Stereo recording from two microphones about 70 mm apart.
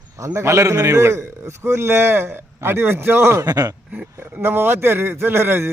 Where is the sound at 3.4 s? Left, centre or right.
Right.